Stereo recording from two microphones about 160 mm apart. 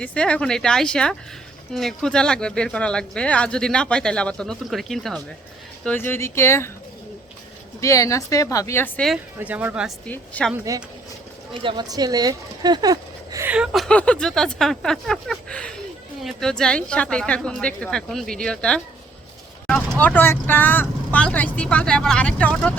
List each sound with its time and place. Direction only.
0.0 s speech: 5° left (ahead or behind)
5.8 s speech: 10° left (ahead or behind)
7.8 s speech: 20° left (ahead or behind)
9.4 s speech: 10° right (ahead or behind)
10.1 s speech: 10° left (ahead or behind)
11.6 s speech: 25° right (ahead or behind)
13.5 s speech: 5° right (ahead or behind)
13.8 s speech: 5° left (ahead or behind)